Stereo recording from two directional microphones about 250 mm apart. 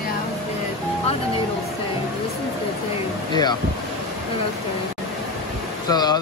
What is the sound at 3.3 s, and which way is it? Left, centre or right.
Speech, centre.